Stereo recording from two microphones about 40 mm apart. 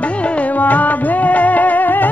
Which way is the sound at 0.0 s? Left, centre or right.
Left.